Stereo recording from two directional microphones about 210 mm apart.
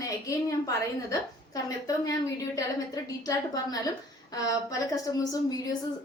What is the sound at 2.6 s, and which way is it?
A woman's voice, 15° left (ahead or behind).